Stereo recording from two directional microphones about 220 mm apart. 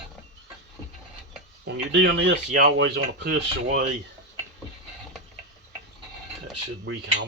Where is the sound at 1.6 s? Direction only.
55° right (ahead or behind).